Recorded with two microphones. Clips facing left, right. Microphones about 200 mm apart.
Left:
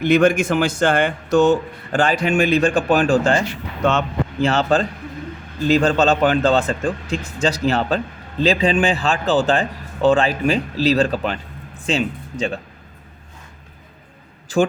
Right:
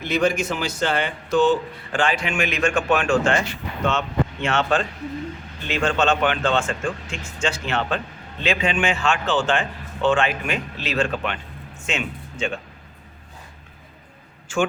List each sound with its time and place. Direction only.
0.0 s a man's voice: 55° left (ahead or behind); by 12.5 s 35° left (ahead or behind)
14.5 s speech: 35° left (ahead or behind)